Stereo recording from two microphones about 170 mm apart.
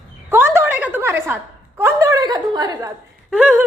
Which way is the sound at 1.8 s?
20° right (ahead or behind).